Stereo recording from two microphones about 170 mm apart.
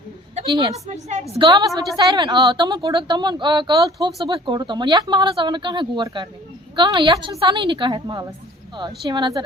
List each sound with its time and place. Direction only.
0.4 s a woman's voice: 25° right (ahead or behind)
0.9 s a woman's voice: 40° right (ahead or behind)
1.3 s a woman's voice: 30° right (ahead or behind)
1.7 s a woman's voice: centre (ahead or behind)
2.0 s speech: 25° right (ahead or behind)